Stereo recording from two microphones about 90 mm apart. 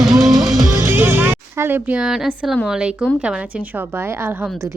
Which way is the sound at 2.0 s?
5° right (ahead or behind).